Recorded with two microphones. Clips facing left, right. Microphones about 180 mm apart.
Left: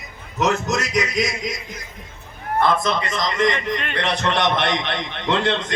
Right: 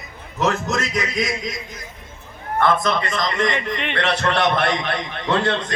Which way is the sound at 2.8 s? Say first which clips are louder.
Right 1 dB; 20° left (ahead or behind).